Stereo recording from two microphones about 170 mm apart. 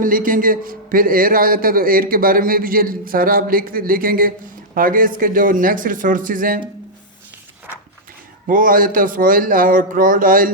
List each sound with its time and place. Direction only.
0.0 s a man's voice: 55° right (ahead or behind)
8.4 s a man's voice: 55° right (ahead or behind)